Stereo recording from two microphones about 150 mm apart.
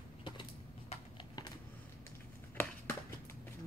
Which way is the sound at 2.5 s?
15° left (ahead or behind).